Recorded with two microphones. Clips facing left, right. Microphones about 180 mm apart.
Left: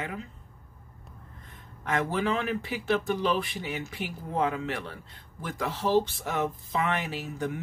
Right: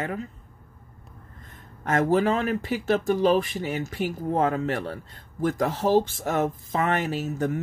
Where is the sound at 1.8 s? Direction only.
45° right (ahead or behind).